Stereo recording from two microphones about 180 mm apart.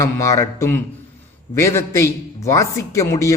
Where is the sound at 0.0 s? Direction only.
15° left (ahead or behind).